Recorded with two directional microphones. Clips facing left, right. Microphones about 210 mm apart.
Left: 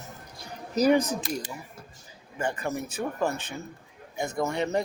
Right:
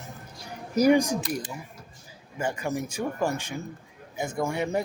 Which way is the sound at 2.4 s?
10° right (ahead or behind).